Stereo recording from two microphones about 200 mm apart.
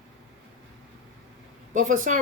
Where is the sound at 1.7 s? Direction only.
40° right (ahead or behind).